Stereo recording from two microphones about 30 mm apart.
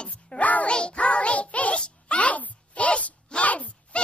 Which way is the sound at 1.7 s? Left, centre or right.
Left.